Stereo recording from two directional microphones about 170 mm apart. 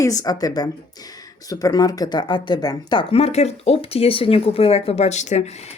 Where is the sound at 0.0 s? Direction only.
20° left (ahead or behind).